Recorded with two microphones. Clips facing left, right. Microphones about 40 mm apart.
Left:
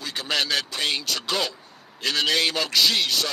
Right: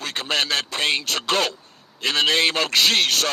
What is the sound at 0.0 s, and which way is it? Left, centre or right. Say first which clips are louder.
A man's voice: right 2 dB; right.